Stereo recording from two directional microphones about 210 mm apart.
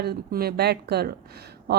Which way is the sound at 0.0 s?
45° right (ahead or behind).